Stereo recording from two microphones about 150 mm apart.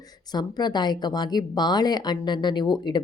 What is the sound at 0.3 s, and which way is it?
Speech, 30° left (ahead or behind).